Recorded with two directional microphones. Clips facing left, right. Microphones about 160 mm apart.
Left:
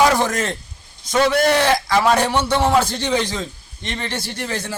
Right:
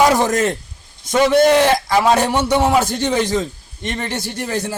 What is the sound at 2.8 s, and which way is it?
Speech, 45° right (ahead or behind).